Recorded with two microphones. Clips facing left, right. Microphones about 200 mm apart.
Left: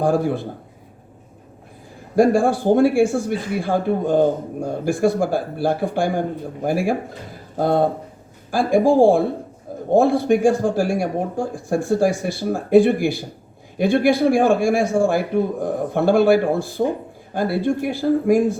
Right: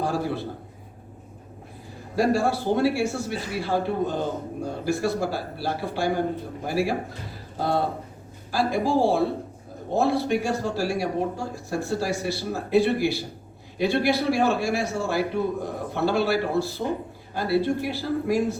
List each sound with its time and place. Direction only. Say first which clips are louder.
0.0 s speech: left 7 dB; 50° left (ahead or behind)
2.1 s speech: left 7 dB; 50° left (ahead or behind)